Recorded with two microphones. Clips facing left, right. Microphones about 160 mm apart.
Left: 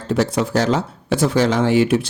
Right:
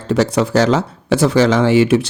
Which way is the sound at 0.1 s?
80° right.